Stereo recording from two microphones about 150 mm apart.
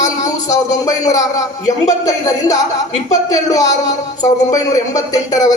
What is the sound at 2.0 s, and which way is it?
Speech, 25° left (ahead or behind).